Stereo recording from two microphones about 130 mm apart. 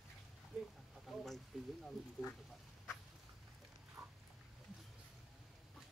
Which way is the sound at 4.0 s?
Centre (ahead or behind).